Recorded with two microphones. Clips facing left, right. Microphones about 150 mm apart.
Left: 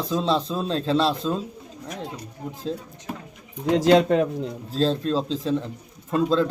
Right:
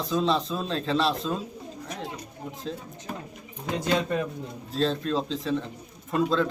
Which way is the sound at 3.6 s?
90° left.